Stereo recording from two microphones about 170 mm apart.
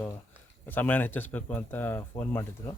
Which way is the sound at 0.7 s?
10° left (ahead or behind).